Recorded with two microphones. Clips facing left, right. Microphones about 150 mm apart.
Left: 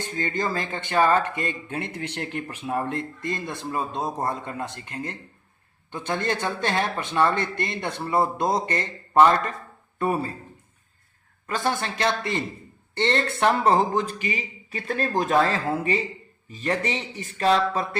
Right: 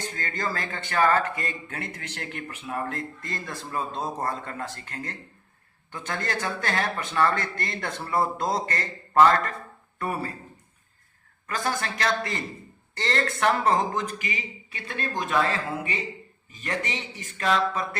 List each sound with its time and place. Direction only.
0.2 s speech: 25° left (ahead or behind)
11.4 s speech: 25° left (ahead or behind)